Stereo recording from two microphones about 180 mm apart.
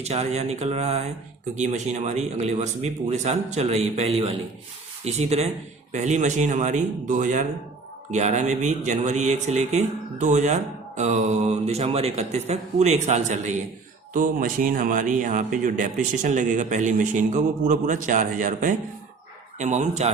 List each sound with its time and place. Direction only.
0.0 s a man's voice: 35° right (ahead or behind)